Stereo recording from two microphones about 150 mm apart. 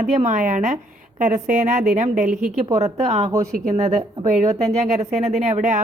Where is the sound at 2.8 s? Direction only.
45° right (ahead or behind).